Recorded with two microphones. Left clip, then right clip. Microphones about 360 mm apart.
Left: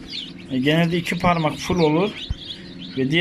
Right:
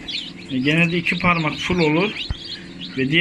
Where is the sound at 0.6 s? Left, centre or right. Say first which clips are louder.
Right 2 dB; centre.